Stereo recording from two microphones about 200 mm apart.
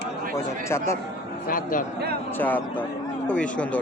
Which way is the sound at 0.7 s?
15° left (ahead or behind).